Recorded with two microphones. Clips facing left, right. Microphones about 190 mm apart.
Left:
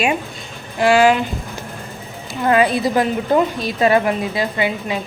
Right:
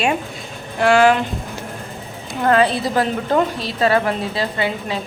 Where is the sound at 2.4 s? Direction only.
10° left (ahead or behind).